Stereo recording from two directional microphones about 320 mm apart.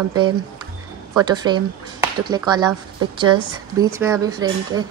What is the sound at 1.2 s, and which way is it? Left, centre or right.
Speech, centre.